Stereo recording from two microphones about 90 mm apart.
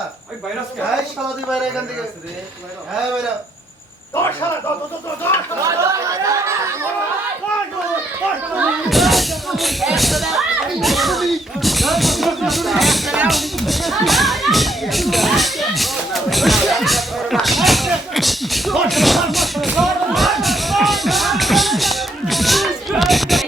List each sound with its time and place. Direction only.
4.1 s a man's voice: 30° left (ahead or behind)
5.6 s speech: 35° right (ahead or behind)
8.9 s speech: centre (ahead or behind)